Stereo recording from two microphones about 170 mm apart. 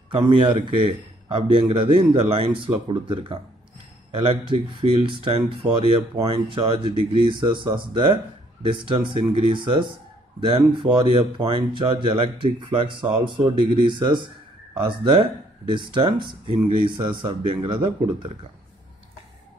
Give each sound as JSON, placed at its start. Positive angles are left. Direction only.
{"t": 0.1, "sound": "speech", "side_deg": -30}